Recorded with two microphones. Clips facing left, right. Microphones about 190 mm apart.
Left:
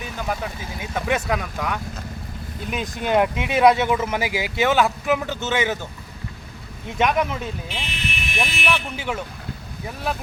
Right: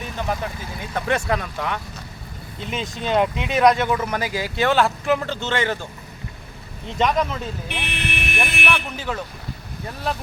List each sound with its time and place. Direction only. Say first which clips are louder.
0.0 s speech: right 1 dB; centre (ahead or behind)
6.8 s speech: even; 15° left (ahead or behind)
7.7 s vehicle: right 2 dB; 65° right (ahead or behind)
8.6 s speech: even; 5° left (ahead or behind)